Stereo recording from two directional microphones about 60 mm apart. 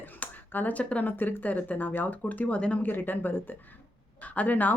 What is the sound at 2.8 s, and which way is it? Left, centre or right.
Speech, left.